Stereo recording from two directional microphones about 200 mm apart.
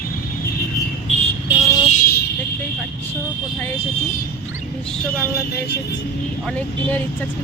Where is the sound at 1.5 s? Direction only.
10° right (ahead or behind).